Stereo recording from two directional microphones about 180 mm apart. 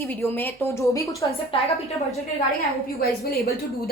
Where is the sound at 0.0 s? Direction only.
10° left (ahead or behind).